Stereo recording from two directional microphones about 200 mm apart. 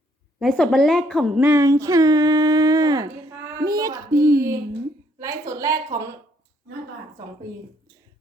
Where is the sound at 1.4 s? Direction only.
15° right (ahead or behind).